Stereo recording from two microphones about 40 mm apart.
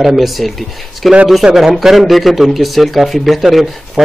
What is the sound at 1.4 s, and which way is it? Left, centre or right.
A man's voice, centre.